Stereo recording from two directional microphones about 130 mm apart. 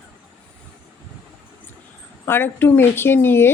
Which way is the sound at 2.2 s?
15° left (ahead or behind).